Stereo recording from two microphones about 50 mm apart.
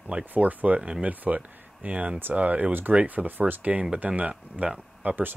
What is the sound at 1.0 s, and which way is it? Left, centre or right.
Speech, right.